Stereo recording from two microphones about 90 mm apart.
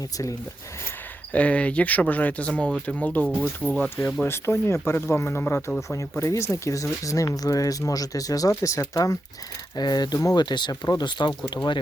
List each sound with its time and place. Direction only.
1.3 s speech: 15° left (ahead or behind); by 9.1 s 40° left (ahead or behind)
9.7 s speech: 50° left (ahead or behind)
10.3 s speech: 55° left (ahead or behind)